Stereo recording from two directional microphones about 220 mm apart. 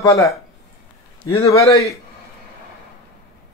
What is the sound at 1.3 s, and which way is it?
Speech, 25° left (ahead or behind).